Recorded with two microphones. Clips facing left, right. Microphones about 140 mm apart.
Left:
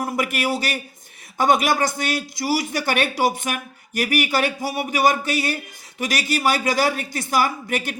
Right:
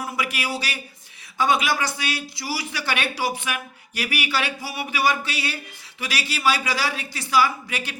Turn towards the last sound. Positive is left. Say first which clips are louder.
# left 4 dB
turn(degrees=50)  # may be behind; listen again after turning